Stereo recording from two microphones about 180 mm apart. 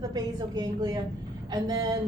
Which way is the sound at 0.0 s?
20° right (ahead or behind).